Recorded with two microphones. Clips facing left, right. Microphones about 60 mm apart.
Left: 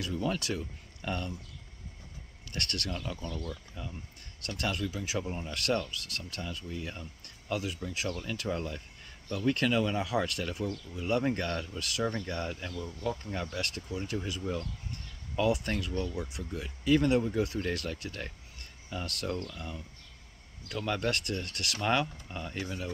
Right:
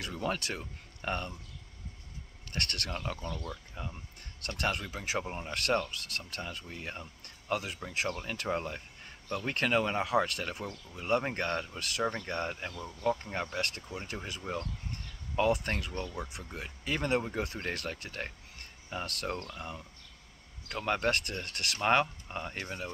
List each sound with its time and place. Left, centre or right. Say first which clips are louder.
0.0 s speech: left 2 dB; right
2.5 s speech: even; right
4.4 s speech: even; right
7.5 s speech: even; right
8.1 s speech: left 1 dB; right
20.8 s speech: right 2 dB; right